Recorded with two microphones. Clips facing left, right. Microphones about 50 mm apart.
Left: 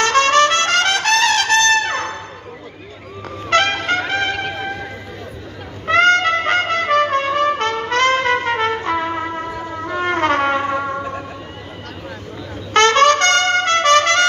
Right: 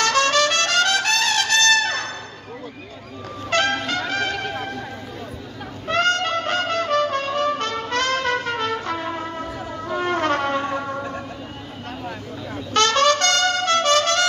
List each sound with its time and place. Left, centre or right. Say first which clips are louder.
0.0 s trumpet: left 5 dB; left
3.4 s trumpet: left 5 dB; left
5.9 s trumpet: left 7 dB; left
10.7 s music: left 5 dB; left
12.7 s trumpet: left 6 dB; left